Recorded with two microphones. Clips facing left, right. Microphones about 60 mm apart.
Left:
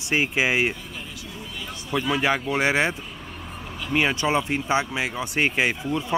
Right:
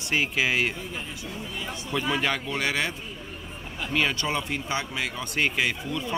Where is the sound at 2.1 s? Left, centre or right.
Centre.